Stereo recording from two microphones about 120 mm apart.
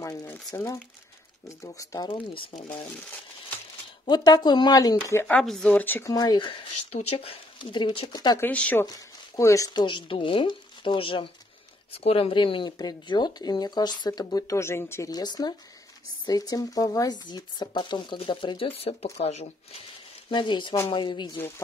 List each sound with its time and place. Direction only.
0.0 s speech: 25° left (ahead or behind)
2.0 s speech: 50° left (ahead or behind)
4.1 s speech: 35° left (ahead or behind)
5.4 s speech: 5° left (ahead or behind)
6.0 s speech: 35° left (ahead or behind)
6.9 s speech: 60° left (ahead or behind)
8.1 s speech: 35° left (ahead or behind)
8.4 s speech: 10° left (ahead or behind)
9.4 s speech: 25° left (ahead or behind)
9.8 s speech: 40° left (ahead or behind); by 15.0 s 20° left (ahead or behind)
15.0 s speech: 35° left (ahead or behind); by 18.9 s 55° left (ahead or behind)
19.1 s speech: 65° left (ahead or behind)
20.2 s speech: 40° left (ahead or behind)